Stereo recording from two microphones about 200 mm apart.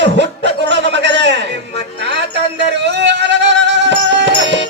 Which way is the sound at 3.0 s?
60° right (ahead or behind).